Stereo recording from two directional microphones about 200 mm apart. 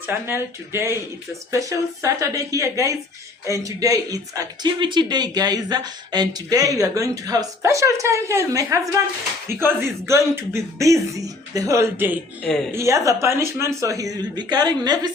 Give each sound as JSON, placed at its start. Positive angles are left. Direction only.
{"t": 0.1, "sound": "speech", "side_deg": -10}
{"t": 12.4, "sound": "speech", "side_deg": 5}
{"t": 12.7, "sound": "a woman's voice", "side_deg": -15}